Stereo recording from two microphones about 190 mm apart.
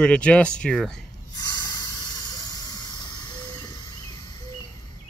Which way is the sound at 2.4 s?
20° left (ahead or behind).